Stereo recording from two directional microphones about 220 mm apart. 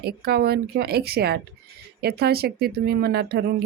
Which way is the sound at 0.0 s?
45° right (ahead or behind).